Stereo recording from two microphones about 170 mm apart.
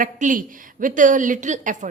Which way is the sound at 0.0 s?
50° right (ahead or behind).